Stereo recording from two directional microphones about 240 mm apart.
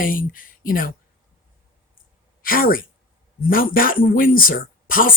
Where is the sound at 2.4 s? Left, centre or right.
Left.